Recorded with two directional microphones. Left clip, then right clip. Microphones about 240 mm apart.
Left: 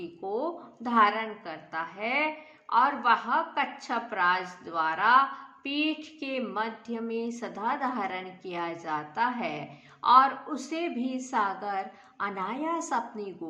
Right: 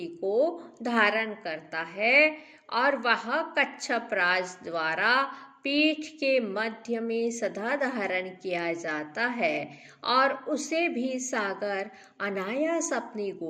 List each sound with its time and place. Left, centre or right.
0.3 s a woman's voice: centre